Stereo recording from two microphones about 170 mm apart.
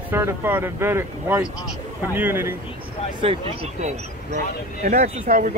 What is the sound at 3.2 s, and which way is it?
Speech, 35° right (ahead or behind).